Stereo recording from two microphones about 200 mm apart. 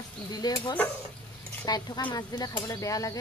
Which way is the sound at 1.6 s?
20° left (ahead or behind).